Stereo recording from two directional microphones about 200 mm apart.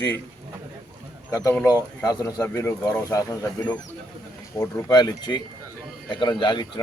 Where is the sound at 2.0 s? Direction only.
15° left (ahead or behind).